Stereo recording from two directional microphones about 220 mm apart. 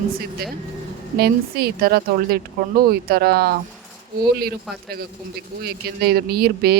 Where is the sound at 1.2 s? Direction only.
45° right (ahead or behind).